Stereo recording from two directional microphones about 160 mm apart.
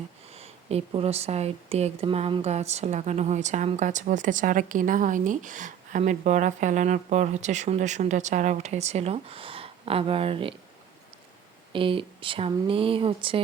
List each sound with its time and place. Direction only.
0.3 s speech: 40° right (ahead or behind)
11.7 s speech: 35° right (ahead or behind)